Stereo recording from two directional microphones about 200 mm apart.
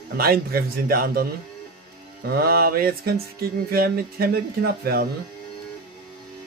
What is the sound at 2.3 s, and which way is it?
Speech, 50° right (ahead or behind).